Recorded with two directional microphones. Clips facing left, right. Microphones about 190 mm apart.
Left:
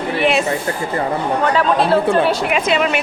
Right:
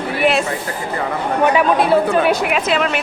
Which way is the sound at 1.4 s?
10° right (ahead or behind).